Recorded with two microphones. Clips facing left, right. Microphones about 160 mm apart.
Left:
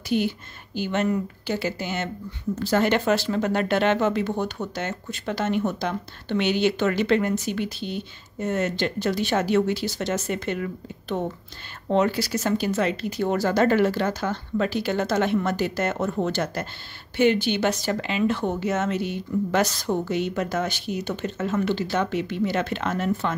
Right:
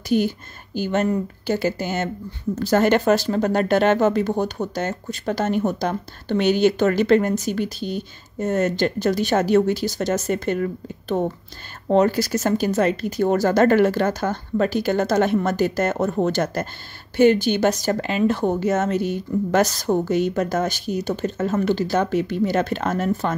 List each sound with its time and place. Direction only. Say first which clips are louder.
0.1 s speech: right 4 dB; 45° right (ahead or behind)